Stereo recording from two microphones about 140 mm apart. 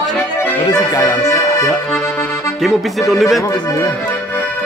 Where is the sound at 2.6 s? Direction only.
Centre (ahead or behind).